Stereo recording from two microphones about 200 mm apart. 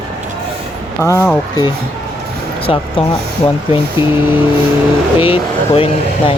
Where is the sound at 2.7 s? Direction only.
30° left (ahead or behind).